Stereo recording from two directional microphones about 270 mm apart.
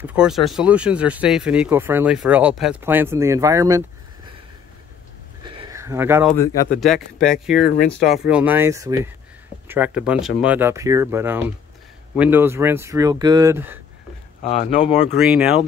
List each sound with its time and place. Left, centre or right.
0.0 s speech: centre
5.4 s a sound: centre
7.2 s speech: centre
7.6 s speech: left
8.3 s speech: centre
14.4 s speech: left
15.1 s speech: centre